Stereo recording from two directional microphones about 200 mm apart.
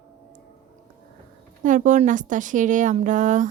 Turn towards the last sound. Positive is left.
turn(degrees=-40)  # may be behind; listen again after turning